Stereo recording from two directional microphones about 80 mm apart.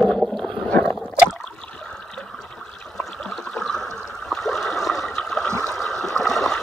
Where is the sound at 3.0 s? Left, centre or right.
Centre.